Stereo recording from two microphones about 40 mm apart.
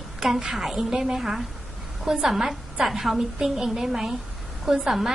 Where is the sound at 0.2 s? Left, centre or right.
Centre.